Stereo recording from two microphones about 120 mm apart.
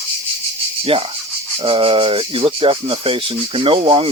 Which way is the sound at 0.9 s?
50° right (ahead or behind).